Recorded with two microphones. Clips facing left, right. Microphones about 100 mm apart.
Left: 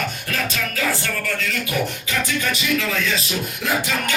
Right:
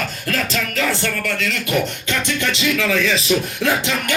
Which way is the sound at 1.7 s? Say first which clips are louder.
Right 6 dB; 75° right (ahead or behind).